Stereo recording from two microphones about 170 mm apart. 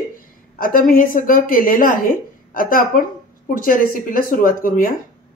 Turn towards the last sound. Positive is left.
turn(degrees=55)  # may be behind; listen again after turning